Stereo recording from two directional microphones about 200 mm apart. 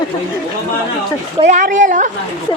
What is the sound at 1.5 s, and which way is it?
Speech, 40° right (ahead or behind).